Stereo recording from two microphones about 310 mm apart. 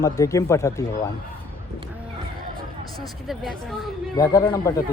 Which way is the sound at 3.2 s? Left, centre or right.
Centre.